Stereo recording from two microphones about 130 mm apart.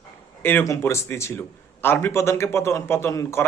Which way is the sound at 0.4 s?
20° left (ahead or behind).